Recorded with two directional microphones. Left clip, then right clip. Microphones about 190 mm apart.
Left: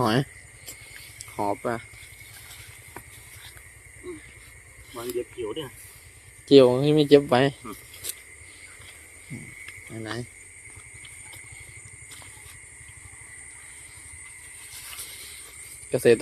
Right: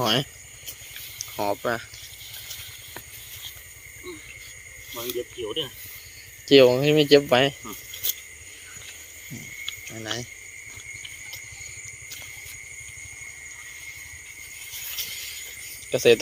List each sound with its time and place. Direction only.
0.0 s speech: 25° left (ahead or behind)
1.4 s speech: 10° left (ahead or behind)
4.9 s speech: centre (ahead or behind); by 7.5 s 20° left (ahead or behind)
9.9 s speech: 15° left (ahead or behind)
15.9 s speech: 20° left (ahead or behind)